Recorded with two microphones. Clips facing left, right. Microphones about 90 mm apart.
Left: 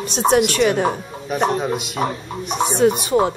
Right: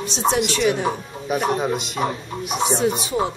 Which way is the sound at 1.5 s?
Centre (ahead or behind).